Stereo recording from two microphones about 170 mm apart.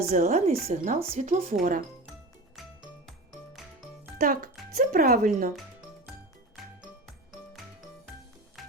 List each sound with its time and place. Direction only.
0.1 s speech: 40° right (ahead or behind)
1.5 s speech: 50° right (ahead or behind)
4.2 s a child's voice: 55° right (ahead or behind)
6.6 s music: centre (ahead or behind)